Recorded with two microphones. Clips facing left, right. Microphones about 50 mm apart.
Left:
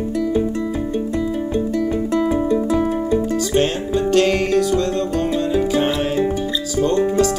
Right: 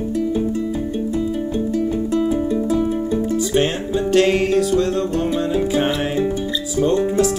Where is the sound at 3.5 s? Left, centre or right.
Right.